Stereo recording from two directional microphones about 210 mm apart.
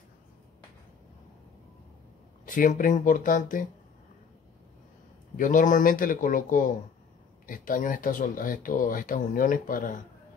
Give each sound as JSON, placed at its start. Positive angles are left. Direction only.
{"t": 2.4, "sound": "speech", "side_deg": 40}
{"t": 5.4, "sound": "speech", "side_deg": 40}